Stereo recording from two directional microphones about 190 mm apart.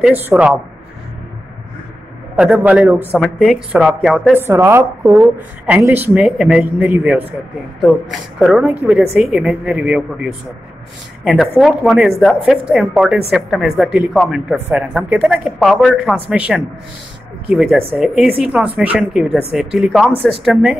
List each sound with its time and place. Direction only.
0.0 s a woman's voice: 5° right (ahead or behind)
2.3 s a woman's voice: 5° right (ahead or behind)